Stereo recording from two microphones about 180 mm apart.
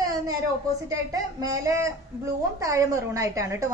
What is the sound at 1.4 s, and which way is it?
A woman's voice, 20° right (ahead or behind).